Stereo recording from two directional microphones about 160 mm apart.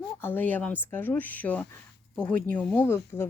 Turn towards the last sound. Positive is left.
turn(degrees=15)  # may be behind; listen again after turning